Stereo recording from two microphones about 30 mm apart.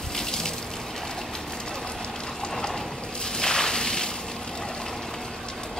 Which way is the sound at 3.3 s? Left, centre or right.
Left.